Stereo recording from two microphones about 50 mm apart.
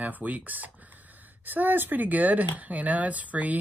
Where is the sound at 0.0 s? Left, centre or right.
Right.